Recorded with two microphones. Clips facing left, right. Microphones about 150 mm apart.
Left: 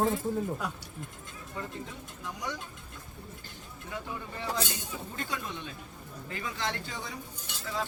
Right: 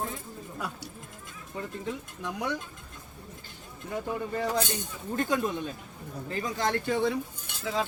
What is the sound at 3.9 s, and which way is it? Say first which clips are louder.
Speech: right 8 dB; 45° right (ahead or behind).